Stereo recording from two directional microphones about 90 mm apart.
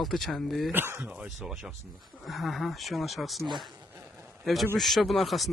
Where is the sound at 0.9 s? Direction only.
10° right (ahead or behind).